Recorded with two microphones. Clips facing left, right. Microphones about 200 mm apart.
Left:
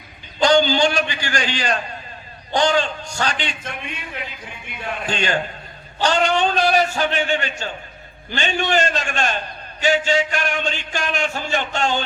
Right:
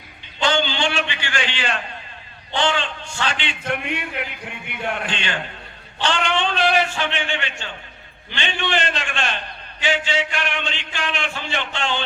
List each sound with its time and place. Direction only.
0.3 s a man's voice: 40° left (ahead or behind)
3.7 s speech: 65° right (ahead or behind)
5.0 s a man's voice: 40° left (ahead or behind)